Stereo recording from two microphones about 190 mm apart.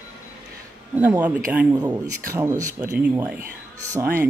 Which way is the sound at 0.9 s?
10° right (ahead or behind).